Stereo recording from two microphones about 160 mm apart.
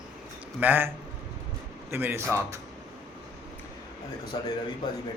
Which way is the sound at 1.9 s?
15° right (ahead or behind).